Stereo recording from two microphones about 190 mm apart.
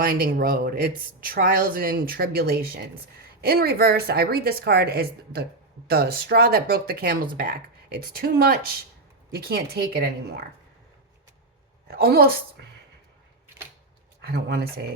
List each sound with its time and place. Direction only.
0.0 s speech: 50° right (ahead or behind)
11.9 s speech: 55° right (ahead or behind)
14.2 s speech: 55° right (ahead or behind)